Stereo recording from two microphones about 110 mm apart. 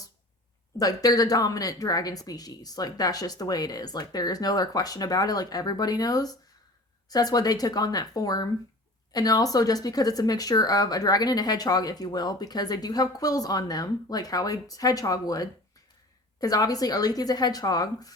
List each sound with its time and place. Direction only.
0.8 s speech: 35° left (ahead or behind)